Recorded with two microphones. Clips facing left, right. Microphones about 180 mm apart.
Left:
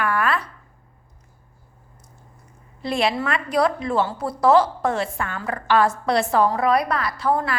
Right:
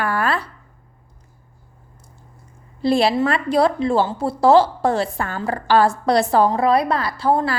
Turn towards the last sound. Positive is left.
turn(degrees=-30)  # may be behind; listen again after turning